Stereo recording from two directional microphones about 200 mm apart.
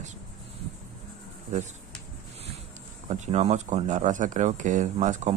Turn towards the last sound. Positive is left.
turn(degrees=-35)  # may be behind; listen again after turning